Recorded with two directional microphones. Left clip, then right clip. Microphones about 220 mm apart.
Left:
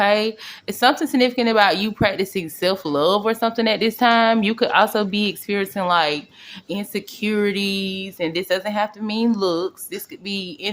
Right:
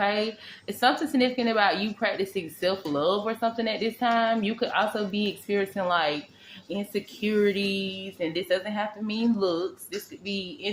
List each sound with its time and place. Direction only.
0.0 s a woman's voice: 45° left (ahead or behind)